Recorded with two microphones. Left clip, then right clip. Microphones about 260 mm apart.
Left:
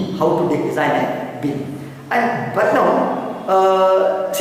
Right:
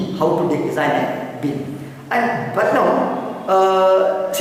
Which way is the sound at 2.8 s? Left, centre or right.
Centre.